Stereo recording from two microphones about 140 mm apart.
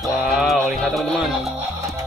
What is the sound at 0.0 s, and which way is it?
Music, centre (ahead or behind).